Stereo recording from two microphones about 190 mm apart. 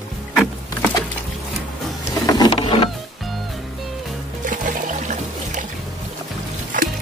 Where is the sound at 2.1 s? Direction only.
20° left (ahead or behind).